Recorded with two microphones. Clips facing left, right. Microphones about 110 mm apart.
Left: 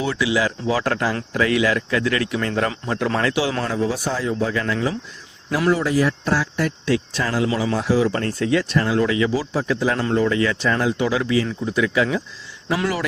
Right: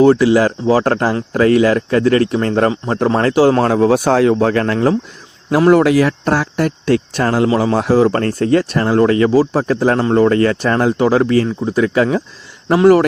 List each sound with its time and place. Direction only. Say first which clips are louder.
0.0 s speech: right 11 dB; 45° right (ahead or behind)
3.6 s speech: right 10 dB; 60° right (ahead or behind)
5.8 s speech: right 7 dB; 80° right; by 13.1 s 45° right (ahead or behind)